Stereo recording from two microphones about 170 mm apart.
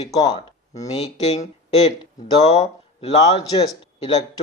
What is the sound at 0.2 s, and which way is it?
Speech, 25° left (ahead or behind).